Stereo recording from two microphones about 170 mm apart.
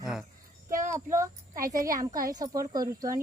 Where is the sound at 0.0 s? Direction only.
5° right (ahead or behind).